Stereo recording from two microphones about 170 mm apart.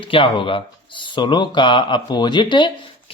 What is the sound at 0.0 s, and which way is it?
A man's voice, 30° left (ahead or behind).